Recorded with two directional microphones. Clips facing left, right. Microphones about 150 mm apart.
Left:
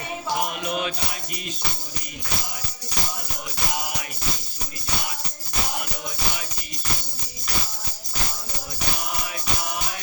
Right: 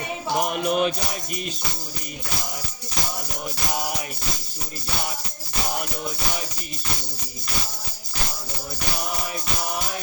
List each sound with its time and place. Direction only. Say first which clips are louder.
0.3 s music: right 7 dB; 45° right (ahead or behind)